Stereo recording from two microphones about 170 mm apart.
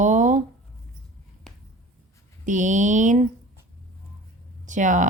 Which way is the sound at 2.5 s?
45° right (ahead or behind).